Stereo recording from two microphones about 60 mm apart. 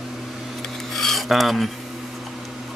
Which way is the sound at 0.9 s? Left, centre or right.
Centre.